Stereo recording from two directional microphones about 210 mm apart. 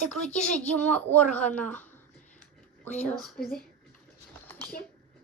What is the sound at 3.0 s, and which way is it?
Speech, centre (ahead or behind).